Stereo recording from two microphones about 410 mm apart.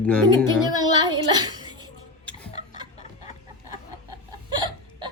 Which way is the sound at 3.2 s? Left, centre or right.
Right.